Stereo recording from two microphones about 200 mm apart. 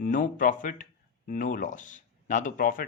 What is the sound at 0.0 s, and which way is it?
Speech, 40° left (ahead or behind).